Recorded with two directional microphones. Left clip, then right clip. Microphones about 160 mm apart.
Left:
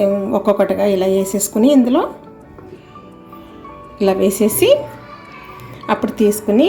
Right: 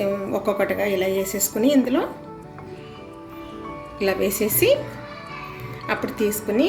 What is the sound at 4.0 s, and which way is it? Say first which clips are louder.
Speech: left 7 dB; 45° left (ahead or behind).